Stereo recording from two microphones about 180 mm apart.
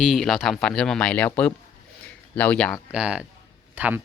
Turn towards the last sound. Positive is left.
turn(degrees=-10)  # may be behind; listen again after turning